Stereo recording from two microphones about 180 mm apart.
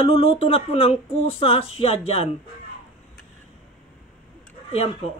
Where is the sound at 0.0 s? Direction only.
30° left (ahead or behind).